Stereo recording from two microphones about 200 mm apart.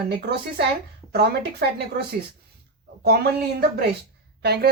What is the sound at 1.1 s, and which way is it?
Speech, 50° right (ahead or behind).